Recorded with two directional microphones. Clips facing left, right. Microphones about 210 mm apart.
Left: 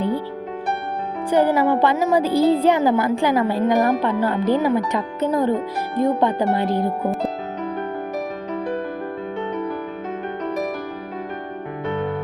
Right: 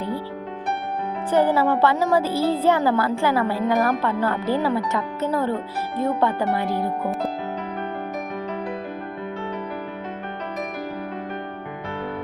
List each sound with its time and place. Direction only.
1.3 s a woman's voice: 15° left (ahead or behind)